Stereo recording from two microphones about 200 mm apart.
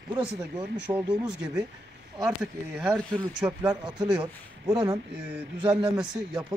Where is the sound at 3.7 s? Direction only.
20° right (ahead or behind).